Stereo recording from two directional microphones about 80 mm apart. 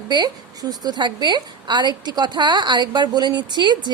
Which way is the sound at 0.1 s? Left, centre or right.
Right.